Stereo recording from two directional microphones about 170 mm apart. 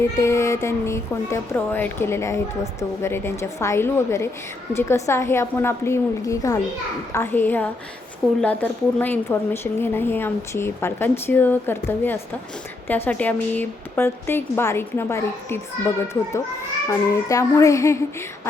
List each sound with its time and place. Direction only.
0.0 s a woman's voice: 15° left (ahead or behind)
16.9 s child singing: 20° left (ahead or behind)